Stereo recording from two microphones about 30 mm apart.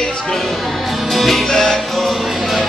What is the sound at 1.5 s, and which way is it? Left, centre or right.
Music, centre.